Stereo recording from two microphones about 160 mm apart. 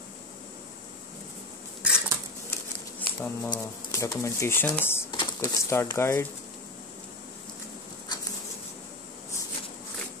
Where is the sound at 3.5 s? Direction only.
20° left (ahead or behind).